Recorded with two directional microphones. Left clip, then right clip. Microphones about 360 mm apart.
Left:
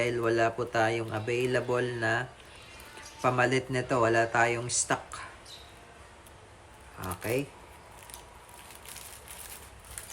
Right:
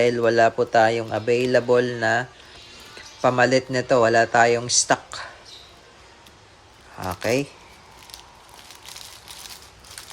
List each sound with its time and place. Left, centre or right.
0.0 s speech: centre
7.0 s speech: centre